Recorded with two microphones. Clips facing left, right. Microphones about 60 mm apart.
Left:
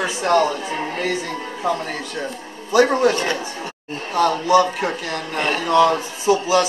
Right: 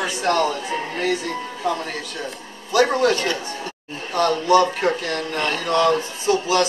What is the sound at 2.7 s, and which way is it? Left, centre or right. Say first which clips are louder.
Speech: left 2 dB; left.